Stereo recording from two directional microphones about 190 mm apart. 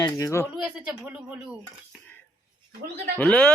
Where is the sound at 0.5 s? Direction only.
5° right (ahead or behind).